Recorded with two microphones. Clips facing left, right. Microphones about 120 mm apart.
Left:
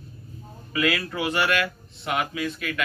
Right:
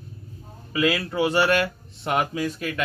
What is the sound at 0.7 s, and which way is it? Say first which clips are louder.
Speech: right 2 dB; 25° right (ahead or behind).